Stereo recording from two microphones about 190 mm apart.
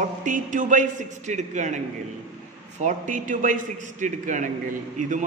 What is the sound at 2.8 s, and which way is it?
A man's voice, 40° right (ahead or behind).